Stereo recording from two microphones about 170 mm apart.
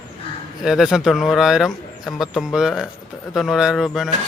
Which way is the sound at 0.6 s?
Centre (ahead or behind).